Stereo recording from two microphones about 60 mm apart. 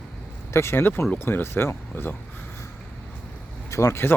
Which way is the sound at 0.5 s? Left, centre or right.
Left.